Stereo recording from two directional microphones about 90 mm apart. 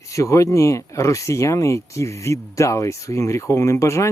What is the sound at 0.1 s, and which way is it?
Speech, 35° left (ahead or behind).